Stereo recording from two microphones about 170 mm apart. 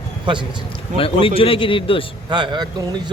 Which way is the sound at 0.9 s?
35° left (ahead or behind).